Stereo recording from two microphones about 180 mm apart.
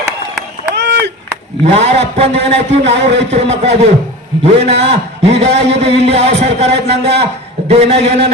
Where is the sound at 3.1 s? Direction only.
75° right (ahead or behind).